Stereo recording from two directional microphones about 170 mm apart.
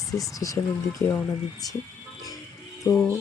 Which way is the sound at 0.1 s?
20° left (ahead or behind).